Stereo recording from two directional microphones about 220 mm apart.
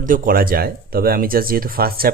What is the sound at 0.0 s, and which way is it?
Speech, 40° right (ahead or behind).